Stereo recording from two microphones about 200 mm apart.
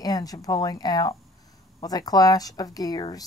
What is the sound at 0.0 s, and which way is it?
Speech, 20° left (ahead or behind).